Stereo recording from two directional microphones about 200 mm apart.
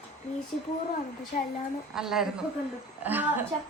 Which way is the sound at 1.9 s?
Centre (ahead or behind).